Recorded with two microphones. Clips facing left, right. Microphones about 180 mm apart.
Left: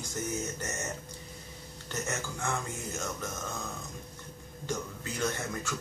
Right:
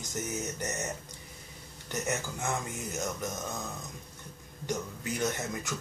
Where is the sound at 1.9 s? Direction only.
20° right (ahead or behind).